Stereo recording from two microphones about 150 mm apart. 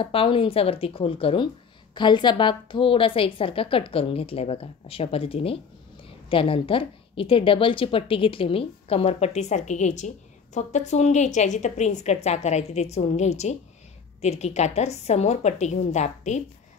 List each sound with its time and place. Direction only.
0.0 s a woman's voice: 35° left (ahead or behind)